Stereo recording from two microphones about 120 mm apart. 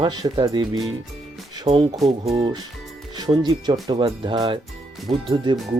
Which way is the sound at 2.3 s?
35° right (ahead or behind).